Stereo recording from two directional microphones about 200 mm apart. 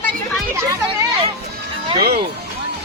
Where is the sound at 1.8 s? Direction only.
30° right (ahead or behind).